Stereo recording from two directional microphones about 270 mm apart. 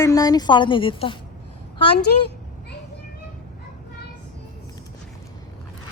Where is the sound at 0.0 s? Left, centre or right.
Centre.